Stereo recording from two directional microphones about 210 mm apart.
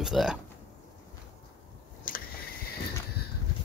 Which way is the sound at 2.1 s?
40° left (ahead or behind).